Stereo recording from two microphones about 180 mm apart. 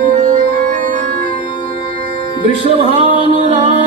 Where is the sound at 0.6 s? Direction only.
50° right (ahead or behind).